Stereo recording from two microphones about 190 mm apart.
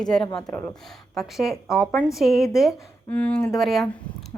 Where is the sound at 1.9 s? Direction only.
10° left (ahead or behind).